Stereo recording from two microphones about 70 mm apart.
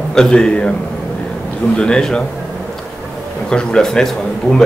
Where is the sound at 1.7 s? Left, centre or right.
Centre.